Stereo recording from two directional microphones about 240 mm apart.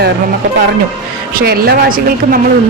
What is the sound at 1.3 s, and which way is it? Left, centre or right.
A man's voice, right.